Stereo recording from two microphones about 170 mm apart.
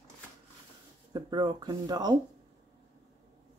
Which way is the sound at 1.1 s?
25° right (ahead or behind).